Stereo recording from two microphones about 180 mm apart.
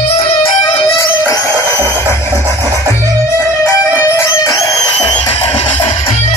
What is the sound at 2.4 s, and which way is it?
Music, 20° right (ahead or behind).